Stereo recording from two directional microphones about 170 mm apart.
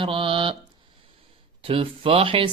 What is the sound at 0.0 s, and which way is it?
Mantra, 30° right (ahead or behind).